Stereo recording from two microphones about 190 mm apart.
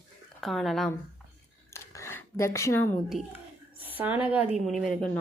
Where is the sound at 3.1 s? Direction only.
40° left (ahead or behind).